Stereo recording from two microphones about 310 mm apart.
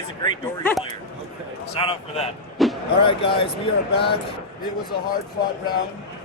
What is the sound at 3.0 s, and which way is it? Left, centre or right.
Speech, centre.